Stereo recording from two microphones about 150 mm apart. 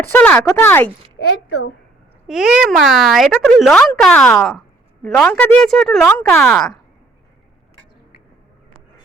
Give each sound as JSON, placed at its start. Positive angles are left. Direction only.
{"t": 0.1, "sound": "speech", "side_deg": 10}
{"t": 2.2, "sound": "speech", "side_deg": -5}